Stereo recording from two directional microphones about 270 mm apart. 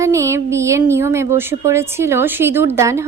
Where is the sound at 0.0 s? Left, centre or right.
Centre.